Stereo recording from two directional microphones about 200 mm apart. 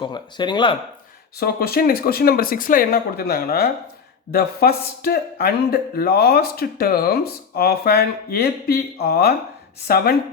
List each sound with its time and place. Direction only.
0.0 s speech: 20° left (ahead or behind)
1.4 s speech: 50° left (ahead or behind)